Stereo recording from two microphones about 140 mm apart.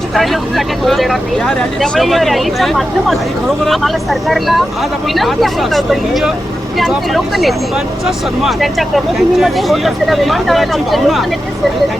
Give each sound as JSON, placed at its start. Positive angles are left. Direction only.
{"t": 0.1, "sound": "speech", "side_deg": 0}